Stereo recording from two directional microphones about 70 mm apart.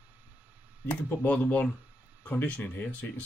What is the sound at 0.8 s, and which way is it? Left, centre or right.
Speech, left.